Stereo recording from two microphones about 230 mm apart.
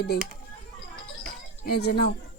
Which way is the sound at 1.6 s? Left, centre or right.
Left.